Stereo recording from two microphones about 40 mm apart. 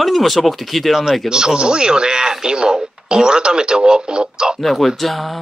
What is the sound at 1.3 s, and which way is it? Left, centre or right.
Speech, centre.